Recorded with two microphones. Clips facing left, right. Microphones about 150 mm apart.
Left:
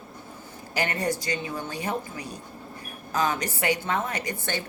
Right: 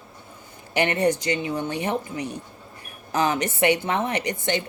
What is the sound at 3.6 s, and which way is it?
Speech, 20° right (ahead or behind).